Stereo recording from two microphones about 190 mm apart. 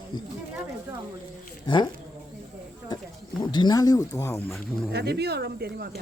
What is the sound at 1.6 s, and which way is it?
Speech, 25° left (ahead or behind).